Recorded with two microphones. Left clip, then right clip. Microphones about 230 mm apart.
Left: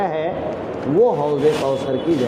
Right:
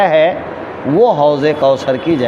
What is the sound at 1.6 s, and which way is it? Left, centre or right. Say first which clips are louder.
Speech: right 9 dB; right.